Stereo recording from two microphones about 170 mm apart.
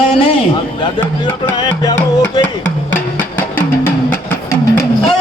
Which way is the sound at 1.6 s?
25° left (ahead or behind).